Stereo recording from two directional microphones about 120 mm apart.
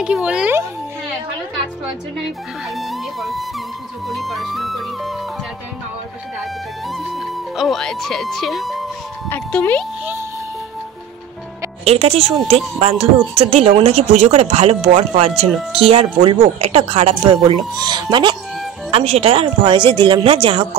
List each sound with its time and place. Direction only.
0.0 s speech: 10° right (ahead or behind)
2.7 s music: centre (ahead or behind)
6.9 s music: centre (ahead or behind)
9.3 s speech: 15° left (ahead or behind)
11.8 s speech: 60° right (ahead or behind); by 18.3 s 40° right (ahead or behind)
18.9 s speech: 55° right (ahead or behind)